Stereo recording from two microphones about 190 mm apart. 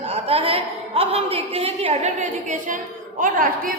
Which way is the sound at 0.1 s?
30° right (ahead or behind).